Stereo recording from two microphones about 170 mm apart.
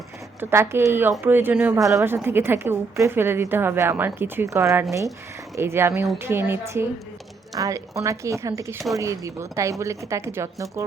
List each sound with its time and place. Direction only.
0.3 s a woman's voice: 15° right (ahead or behind)